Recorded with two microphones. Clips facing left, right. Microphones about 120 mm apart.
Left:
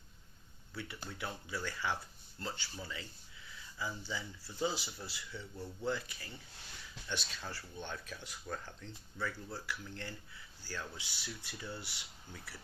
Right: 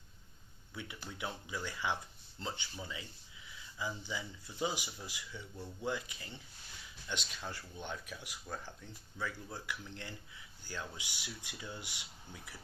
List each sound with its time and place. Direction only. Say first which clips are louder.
0.7 s speech: left 1 dB; 15° right (ahead or behind)